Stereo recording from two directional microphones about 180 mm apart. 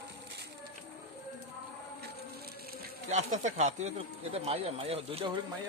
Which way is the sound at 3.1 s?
40° right (ahead or behind).